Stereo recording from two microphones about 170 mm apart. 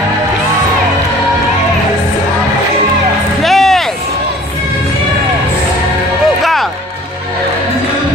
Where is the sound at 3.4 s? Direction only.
Centre (ahead or behind).